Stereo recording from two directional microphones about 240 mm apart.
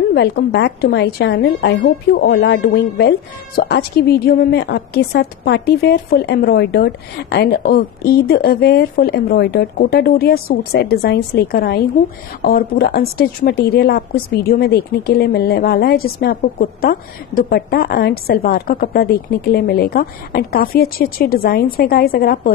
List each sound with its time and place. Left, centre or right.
0.1 s a woman's voice: left